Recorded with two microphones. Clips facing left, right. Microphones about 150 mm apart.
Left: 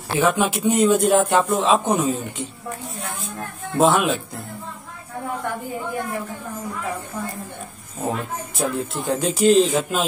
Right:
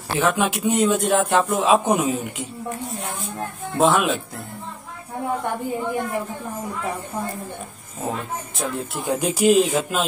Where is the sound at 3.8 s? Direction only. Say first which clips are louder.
Left 1 dB; centre (ahead or behind).